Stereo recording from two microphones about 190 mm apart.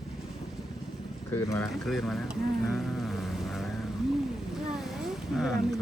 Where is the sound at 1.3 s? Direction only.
15° left (ahead or behind).